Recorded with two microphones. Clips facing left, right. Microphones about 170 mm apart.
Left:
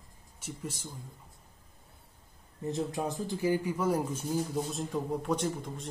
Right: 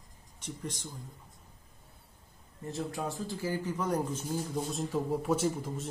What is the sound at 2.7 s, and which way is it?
Speech, 20° left (ahead or behind).